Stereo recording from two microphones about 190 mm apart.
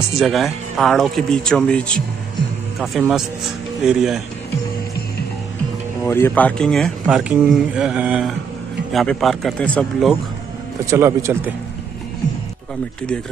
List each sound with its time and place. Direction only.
0.1 s speech: centre (ahead or behind)
6.0 s speech: 10° left (ahead or behind)
10.9 s speech: 15° right (ahead or behind)